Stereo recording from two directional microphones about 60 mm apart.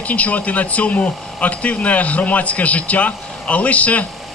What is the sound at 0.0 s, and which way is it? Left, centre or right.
Speech, left.